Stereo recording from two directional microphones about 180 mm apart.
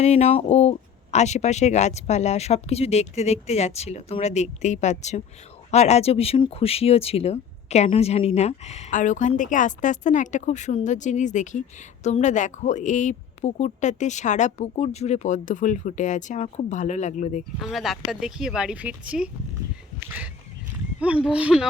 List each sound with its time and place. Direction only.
0.0 s speech: 35° left (ahead or behind)
17.6 s speech: centre (ahead or behind)
21.0 s speech: 5° right (ahead or behind)